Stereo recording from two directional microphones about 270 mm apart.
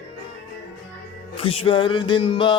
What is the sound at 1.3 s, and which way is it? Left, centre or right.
Music, centre.